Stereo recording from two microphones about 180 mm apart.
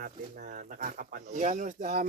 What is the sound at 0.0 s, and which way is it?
Speech, 50° right (ahead or behind).